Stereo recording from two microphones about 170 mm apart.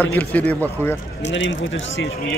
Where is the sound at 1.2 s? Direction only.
90° left.